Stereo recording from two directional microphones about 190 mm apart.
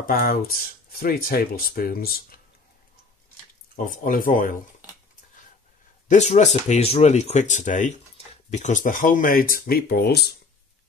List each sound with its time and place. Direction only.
0.0 s speech: 50° left (ahead or behind)
3.7 s speech: 45° left (ahead or behind)
6.0 s speech: 40° left (ahead or behind); by 10.3 s 55° left (ahead or behind)